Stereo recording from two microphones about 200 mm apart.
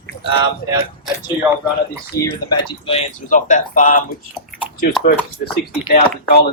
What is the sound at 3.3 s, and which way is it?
Speech, 40° left (ahead or behind).